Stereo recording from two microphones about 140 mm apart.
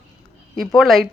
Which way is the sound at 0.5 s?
Centre (ahead or behind).